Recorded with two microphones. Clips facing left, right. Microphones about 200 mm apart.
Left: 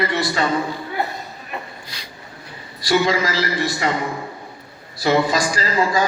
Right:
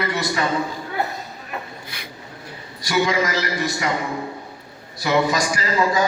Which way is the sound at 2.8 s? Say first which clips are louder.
Left 2 dB; 30° left (ahead or behind).